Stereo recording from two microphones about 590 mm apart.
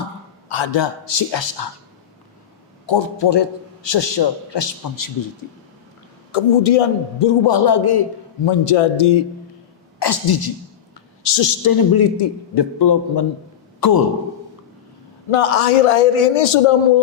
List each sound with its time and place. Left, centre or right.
0.4 s a man's voice: left
2.8 s a man's voice: left
6.3 s a man's voice: left
8.4 s a man's voice: left
10.0 s a man's voice: left
11.2 s a woman's voice: left
11.6 s a man's voice: left
15.3 s a man's voice: left